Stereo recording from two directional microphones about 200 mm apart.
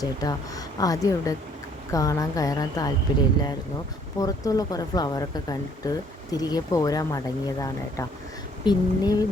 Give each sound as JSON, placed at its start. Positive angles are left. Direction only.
{"t": 0.0, "sound": "speech", "side_deg": 20}
{"t": 4.2, "sound": "speech", "side_deg": 20}